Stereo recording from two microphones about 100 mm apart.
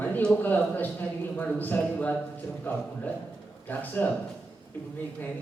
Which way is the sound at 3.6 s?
20° left (ahead or behind).